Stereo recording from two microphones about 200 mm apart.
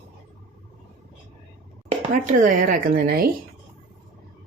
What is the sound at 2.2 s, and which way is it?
Speech, 40° right (ahead or behind).